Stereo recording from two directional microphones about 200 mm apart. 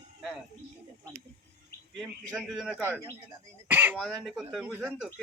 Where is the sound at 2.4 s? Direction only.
Centre (ahead or behind).